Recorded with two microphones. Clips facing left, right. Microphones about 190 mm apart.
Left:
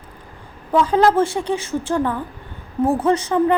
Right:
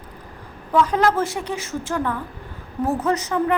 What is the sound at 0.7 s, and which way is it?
A woman's voice, 30° left (ahead or behind).